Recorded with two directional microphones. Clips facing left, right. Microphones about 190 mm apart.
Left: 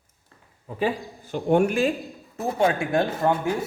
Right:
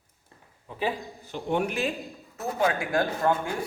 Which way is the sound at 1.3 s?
50° left (ahead or behind).